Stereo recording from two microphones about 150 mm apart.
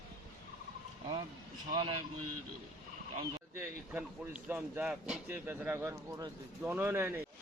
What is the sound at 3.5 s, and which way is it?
A man's voice, 10° right (ahead or behind).